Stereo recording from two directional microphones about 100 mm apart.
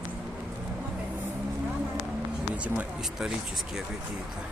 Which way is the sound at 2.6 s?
15° right (ahead or behind).